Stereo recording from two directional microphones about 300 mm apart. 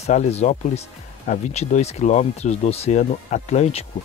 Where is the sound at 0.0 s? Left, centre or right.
Left.